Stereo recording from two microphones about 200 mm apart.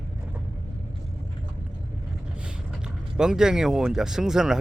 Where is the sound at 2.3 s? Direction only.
5° right (ahead or behind).